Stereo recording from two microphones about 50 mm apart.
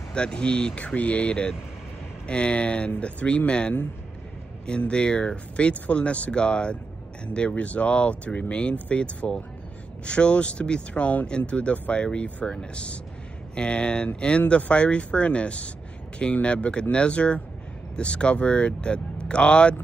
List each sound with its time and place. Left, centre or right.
0.1 s speech: centre